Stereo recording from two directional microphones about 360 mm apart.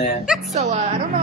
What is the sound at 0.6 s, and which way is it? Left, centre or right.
Speech, centre.